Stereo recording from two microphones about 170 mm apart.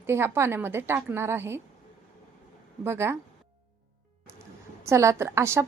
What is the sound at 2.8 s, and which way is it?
Speech, 15° right (ahead or behind).